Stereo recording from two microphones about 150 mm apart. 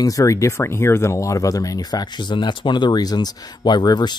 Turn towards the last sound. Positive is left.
turn(degrees=30)  # may be behind; listen again after turning